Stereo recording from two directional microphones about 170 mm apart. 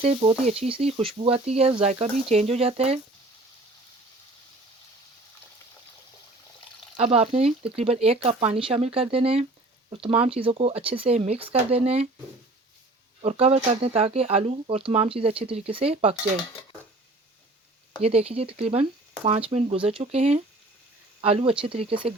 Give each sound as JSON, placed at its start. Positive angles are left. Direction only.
{"t": 0.0, "sound": "speech", "side_deg": -35}
{"t": 6.9, "sound": "speech", "side_deg": -35}
{"t": 13.2, "sound": "speech", "side_deg": -40}
{"t": 18.0, "sound": "speech", "side_deg": -35}